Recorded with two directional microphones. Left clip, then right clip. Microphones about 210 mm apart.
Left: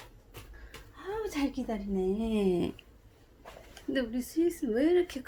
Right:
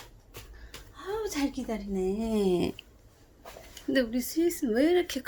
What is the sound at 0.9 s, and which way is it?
A woman's voice, centre (ahead or behind).